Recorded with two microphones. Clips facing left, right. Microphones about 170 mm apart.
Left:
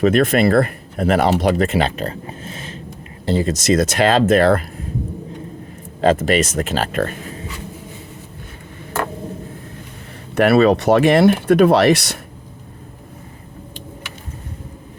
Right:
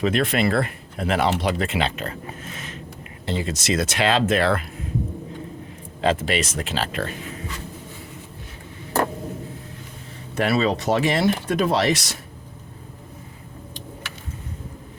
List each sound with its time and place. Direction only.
0.0 s speech: 45° left (ahead or behind)
3.2 s speech: 40° left (ahead or behind)
6.0 s speech: 45° left (ahead or behind)
10.3 s speech: 65° left (ahead or behind)